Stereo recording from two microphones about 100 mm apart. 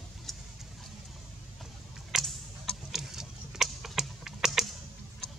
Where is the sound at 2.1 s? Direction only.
Centre (ahead or behind).